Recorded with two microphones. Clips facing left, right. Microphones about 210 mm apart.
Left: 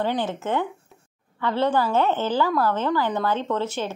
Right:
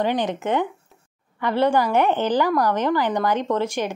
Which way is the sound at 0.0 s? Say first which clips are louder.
Right 3 dB; 15° right (ahead or behind).